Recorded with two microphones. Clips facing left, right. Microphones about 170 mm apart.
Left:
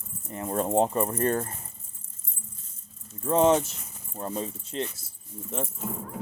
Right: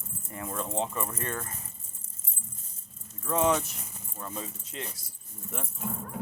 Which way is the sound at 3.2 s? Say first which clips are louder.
Left 5 dB; 30° left (ahead or behind).